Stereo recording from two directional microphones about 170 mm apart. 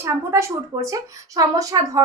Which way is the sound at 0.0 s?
15° right (ahead or behind).